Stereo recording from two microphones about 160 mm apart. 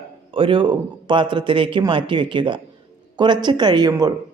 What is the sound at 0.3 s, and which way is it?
A man's voice, 35° right (ahead or behind).